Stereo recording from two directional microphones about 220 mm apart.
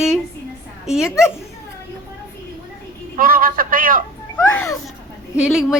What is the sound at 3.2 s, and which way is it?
Speech, 40° right (ahead or behind).